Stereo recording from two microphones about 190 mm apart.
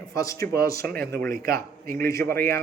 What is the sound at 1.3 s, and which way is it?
Speech, 50° right (ahead or behind).